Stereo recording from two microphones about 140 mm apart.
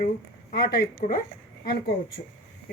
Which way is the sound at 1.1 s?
80° left.